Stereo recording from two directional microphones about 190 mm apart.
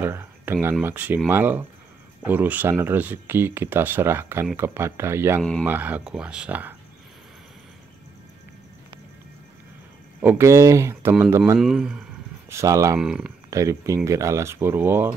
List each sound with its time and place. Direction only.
0.0 s speech: 15° right (ahead or behind)
5.4 s speech: 5° left (ahead or behind)
5.7 s speech: 10° right (ahead or behind)
10.2 s speech: 15° right (ahead or behind)
12.4 s speech: 15° right (ahead or behind)
13.0 s speech: 5° right (ahead or behind)
13.5 s speech: 15° right (ahead or behind)